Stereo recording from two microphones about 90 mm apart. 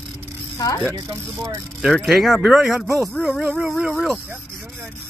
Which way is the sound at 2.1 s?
Centre (ahead or behind).